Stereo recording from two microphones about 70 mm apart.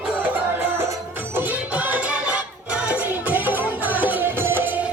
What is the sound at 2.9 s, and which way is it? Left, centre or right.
Music, right.